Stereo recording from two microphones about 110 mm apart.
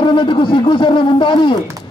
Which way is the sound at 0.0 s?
45° left (ahead or behind).